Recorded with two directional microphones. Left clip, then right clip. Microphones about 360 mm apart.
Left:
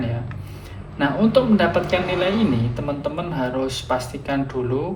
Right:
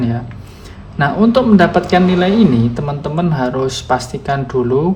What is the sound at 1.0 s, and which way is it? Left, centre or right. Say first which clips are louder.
Speech: right 5 dB; centre.